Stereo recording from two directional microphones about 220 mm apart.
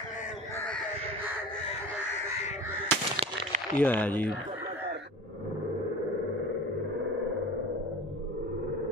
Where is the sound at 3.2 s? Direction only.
30° right (ahead or behind).